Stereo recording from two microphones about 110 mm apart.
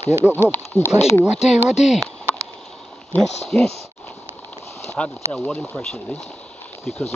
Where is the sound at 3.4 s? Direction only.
5° left (ahead or behind).